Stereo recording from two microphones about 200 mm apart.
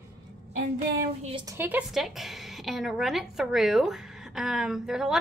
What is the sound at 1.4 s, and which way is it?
A woman's voice, 10° right (ahead or behind).